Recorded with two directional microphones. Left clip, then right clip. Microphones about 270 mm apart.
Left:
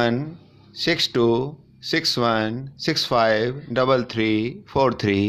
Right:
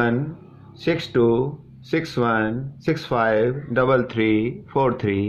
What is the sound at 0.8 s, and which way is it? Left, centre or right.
Speech, left.